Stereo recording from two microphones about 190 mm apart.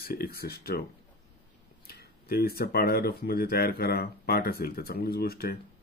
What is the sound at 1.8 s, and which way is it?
Speech, 55° left (ahead or behind).